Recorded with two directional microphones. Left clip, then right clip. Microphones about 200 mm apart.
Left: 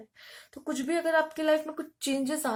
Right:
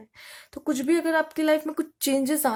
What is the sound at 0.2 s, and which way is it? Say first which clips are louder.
Speech: right 8 dB; 45° right (ahead or behind).